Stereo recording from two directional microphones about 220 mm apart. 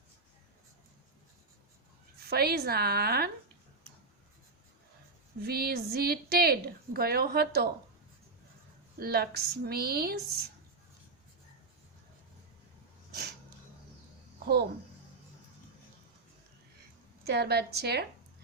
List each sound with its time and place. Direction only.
2.2 s a woman's voice: 45° right (ahead or behind)
5.4 s a woman's voice: 45° right (ahead or behind)
9.0 s a woman's voice: 45° right (ahead or behind)
14.3 s speech: 45° right (ahead or behind)
17.2 s a woman's voice: 45° right (ahead or behind)